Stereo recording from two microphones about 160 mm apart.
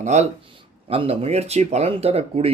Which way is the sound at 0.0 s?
45° right (ahead or behind).